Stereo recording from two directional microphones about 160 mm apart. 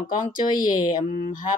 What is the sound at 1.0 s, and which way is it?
Speech, 40° left (ahead or behind).